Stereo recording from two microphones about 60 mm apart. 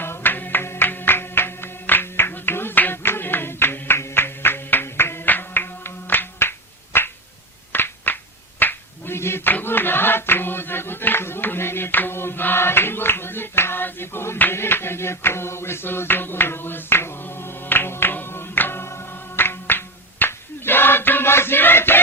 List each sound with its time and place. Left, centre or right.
0.0 s music: left
6.9 s a sound: left
19.4 s music: left